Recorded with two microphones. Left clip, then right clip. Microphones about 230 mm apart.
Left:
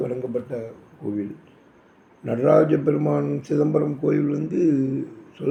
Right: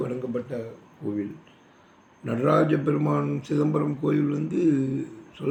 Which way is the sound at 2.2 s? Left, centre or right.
Centre.